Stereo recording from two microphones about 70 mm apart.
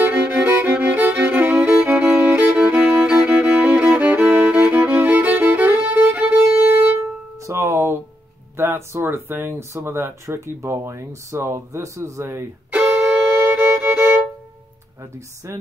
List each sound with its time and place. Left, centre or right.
0.0 s violin: right
1.6 s music: centre
6.1 s violin: centre
7.3 s music: right
8.5 s speech: right
12.7 s music: centre
13.1 s violin: right
15.0 s speech: right